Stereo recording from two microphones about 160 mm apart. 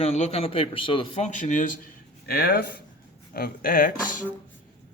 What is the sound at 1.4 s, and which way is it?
Speech, 50° left (ahead or behind).